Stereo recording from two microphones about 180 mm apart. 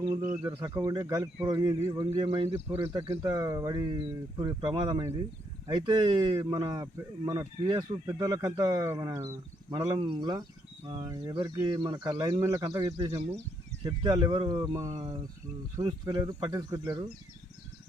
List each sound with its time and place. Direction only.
0.0 s speech: 25° right (ahead or behind)